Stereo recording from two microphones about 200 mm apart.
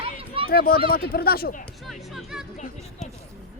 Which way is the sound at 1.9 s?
Centre (ahead or behind).